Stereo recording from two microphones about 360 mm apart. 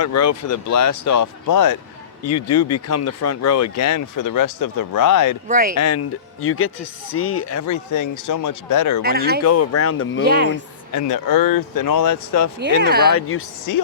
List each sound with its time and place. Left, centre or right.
0.0 s speech: left
5.5 s speech: right
5.7 s speech: left
7.6 s speech: left
9.0 s speech: right
9.4 s speech: left
10.2 s speech: right
10.9 s speech: left
12.8 s speech: right
13.1 s speech: left